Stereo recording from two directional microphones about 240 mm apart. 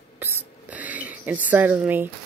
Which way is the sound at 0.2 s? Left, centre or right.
Centre.